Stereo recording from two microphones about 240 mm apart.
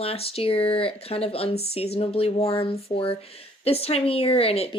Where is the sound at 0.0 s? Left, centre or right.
Left.